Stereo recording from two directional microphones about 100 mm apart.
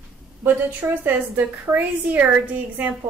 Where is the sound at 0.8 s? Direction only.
20° right (ahead or behind).